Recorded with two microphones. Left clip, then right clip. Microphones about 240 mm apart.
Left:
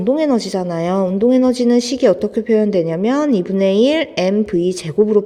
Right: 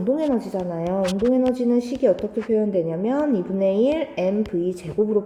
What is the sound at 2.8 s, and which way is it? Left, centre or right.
A woman's voice, left.